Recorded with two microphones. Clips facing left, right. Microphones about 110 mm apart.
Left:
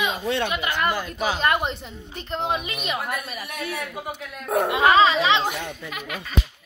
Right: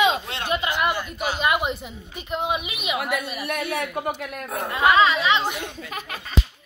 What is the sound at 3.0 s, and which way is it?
Speech, 90° right.